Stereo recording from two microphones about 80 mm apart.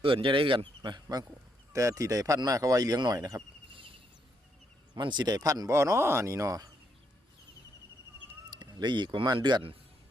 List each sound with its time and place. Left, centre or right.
0.0 s a man's voice: right
1.7 s speech: right
3.7 s a sound: right
4.9 s speech: right
8.4 s speech: right